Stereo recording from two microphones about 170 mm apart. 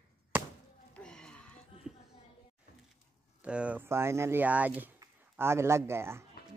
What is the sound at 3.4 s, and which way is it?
Speech, 5° right (ahead or behind).